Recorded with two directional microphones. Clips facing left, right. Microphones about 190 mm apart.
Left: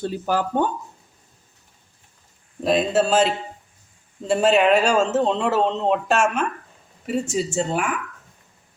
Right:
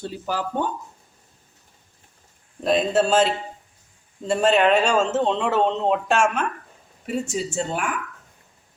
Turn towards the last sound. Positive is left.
turn(degrees=0)  # may be behind; listen again after turning